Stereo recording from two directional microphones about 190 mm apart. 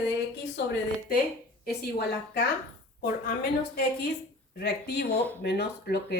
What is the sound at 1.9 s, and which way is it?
A woman's voice, 60° left (ahead or behind).